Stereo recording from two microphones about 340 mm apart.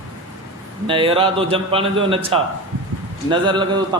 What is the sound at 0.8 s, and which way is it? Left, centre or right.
A man's voice, centre.